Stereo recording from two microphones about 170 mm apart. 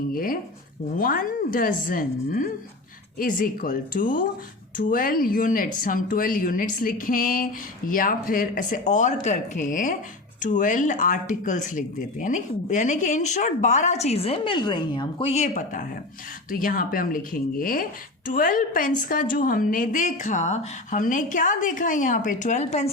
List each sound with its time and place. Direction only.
0.1 s a woman's voice: 55° left (ahead or behind); by 15.3 s 25° left (ahead or behind)
15.3 s a woman's voice: 45° left (ahead or behind)